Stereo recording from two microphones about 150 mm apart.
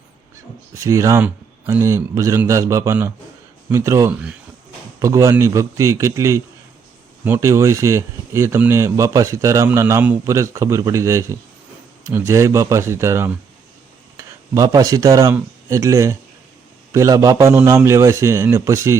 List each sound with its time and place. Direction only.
0.7 s speech: 20° right (ahead or behind)